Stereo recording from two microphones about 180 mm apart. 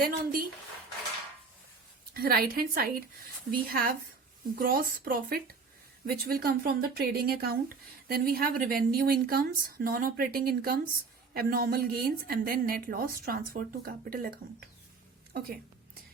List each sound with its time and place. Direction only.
0.0 s a woman's voice: 50° right (ahead or behind)
2.1 s a woman's voice: 55° right (ahead or behind)